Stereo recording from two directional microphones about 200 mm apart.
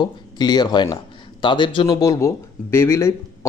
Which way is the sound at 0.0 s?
20° left (ahead or behind).